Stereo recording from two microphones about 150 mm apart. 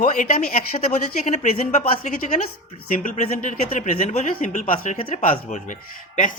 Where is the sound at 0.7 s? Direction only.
45° left (ahead or behind).